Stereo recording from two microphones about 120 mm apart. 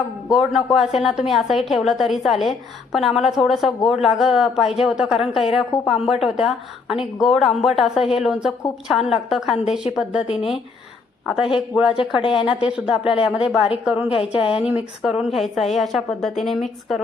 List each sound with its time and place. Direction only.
0.3 s a woman's voice: 5° right (ahead or behind)
11.9 s speech: 45° left (ahead or behind)
12.5 s speech: 10° right (ahead or behind)
13.1 s speech: 45° left (ahead or behind)
13.3 s a woman's voice: 5° right (ahead or behind)
14.1 s speech: 50° left (ahead or behind)
14.6 s a woman's voice: 15° right (ahead or behind)